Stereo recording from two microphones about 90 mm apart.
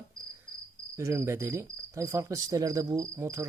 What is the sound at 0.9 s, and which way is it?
Cricket, 35° right (ahead or behind).